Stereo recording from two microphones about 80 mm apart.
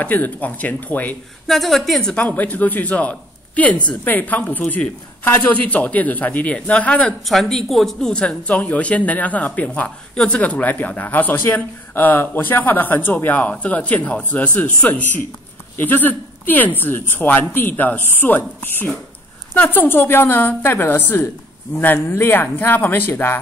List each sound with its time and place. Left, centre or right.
0.0 s speech: left
1.5 s speech: centre
7.2 s speech: centre; by 23.4 s left